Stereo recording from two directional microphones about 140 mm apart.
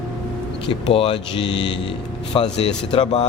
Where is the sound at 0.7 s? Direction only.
40° left (ahead or behind).